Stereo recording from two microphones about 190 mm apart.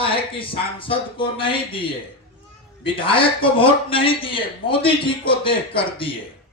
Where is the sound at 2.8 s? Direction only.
25° left (ahead or behind).